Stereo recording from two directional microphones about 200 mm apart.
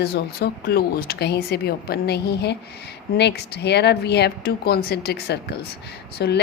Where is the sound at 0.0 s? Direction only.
55° left (ahead or behind).